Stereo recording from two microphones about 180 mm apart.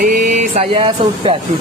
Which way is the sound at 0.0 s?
45° right (ahead or behind).